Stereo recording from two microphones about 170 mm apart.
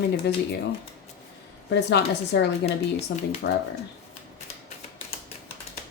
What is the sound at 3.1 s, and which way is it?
Speech, 90° left.